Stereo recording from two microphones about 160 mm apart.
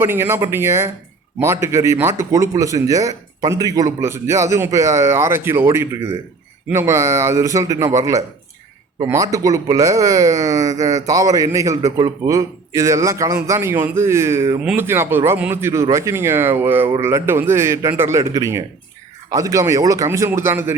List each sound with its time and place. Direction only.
0.0 s a man's voice: 15° right (ahead or behind)